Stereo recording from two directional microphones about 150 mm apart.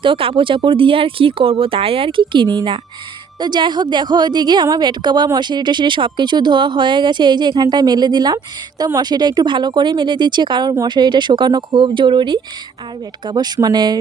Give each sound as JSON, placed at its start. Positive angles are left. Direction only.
{"t": 0.0, "sound": "a woman's voice", "side_deg": -35}